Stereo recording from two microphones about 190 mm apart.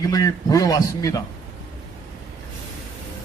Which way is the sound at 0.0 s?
20° left (ahead or behind).